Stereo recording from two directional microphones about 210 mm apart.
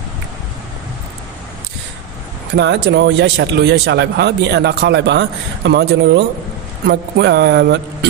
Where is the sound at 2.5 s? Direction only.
55° right (ahead or behind).